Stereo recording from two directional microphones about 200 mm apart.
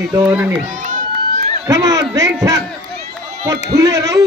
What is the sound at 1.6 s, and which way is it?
Speech, 15° right (ahead or behind).